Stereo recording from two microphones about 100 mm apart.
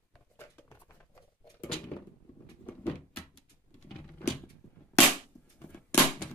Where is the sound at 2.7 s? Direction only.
15° left (ahead or behind).